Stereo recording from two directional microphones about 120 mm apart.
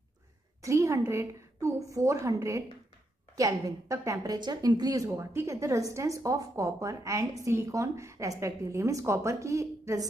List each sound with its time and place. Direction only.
0.6 s a woman's voice: 25° right (ahead or behind)